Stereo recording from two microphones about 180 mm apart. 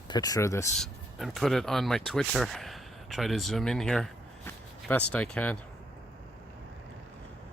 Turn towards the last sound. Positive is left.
turn(degrees=5)  # may be behind; listen again after turning